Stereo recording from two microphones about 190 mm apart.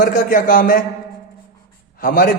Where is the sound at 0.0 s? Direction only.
45° left (ahead or behind).